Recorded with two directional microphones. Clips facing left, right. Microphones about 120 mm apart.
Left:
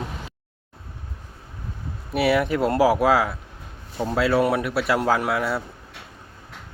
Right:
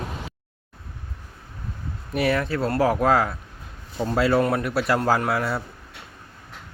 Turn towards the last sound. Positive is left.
turn(degrees=0)  # may be behind; listen again after turning